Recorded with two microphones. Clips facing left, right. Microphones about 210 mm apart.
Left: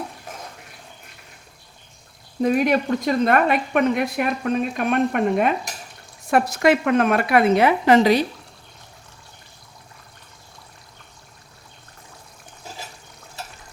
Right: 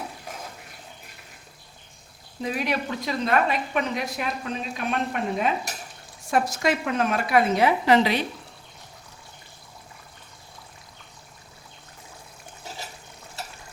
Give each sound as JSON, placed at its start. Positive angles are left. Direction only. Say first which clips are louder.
{"t": 2.4, "sound": "a woman's voice", "louder": "left 9 dB", "side_deg": 50}